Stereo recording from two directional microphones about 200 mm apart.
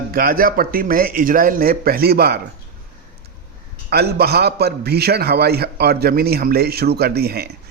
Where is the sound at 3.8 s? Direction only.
55° right (ahead or behind).